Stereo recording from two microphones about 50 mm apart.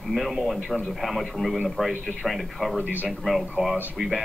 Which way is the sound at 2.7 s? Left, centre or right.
Right.